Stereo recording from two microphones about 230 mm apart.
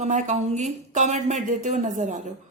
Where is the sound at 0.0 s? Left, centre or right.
Right.